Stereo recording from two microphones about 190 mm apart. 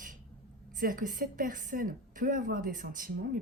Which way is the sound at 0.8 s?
45° right (ahead or behind).